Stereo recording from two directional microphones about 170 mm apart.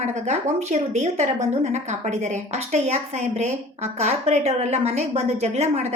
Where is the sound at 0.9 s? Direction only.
40° right (ahead or behind).